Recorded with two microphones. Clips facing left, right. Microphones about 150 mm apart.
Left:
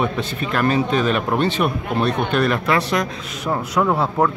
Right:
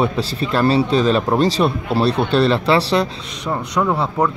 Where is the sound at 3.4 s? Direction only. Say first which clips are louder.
Even; 5° left (ahead or behind).